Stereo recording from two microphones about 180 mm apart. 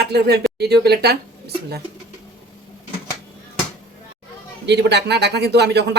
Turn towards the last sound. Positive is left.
turn(degrees=-65)  # may be behind; listen again after turning